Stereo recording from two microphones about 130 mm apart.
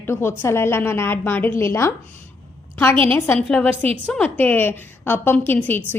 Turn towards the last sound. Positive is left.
turn(degrees=15)  # may be behind; listen again after turning